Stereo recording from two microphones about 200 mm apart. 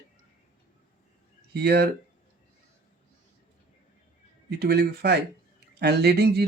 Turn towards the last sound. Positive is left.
turn(degrees=-55)  # may be behind; listen again after turning